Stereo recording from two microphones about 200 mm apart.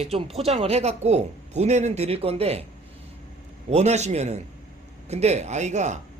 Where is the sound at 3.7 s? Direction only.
35° right (ahead or behind).